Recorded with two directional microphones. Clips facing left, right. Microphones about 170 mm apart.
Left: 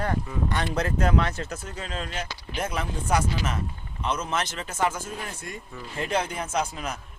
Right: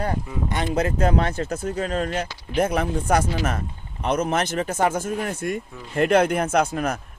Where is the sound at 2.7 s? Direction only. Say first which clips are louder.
Right 5 dB; 60° right (ahead or behind).